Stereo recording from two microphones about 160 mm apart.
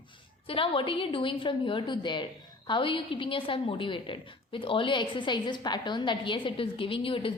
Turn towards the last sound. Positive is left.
turn(degrees=35)  # may be behind; listen again after turning